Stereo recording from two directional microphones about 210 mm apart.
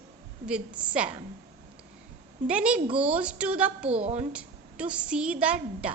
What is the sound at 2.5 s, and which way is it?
A woman's voice, 5° right (ahead or behind).